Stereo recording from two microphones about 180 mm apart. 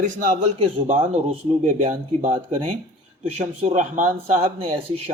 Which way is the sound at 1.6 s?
45° right (ahead or behind).